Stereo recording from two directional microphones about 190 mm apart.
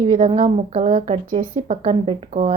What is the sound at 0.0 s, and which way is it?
A woman's voice, 35° right (ahead or behind).